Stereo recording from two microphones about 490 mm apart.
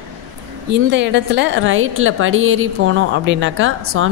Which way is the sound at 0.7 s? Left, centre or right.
Right.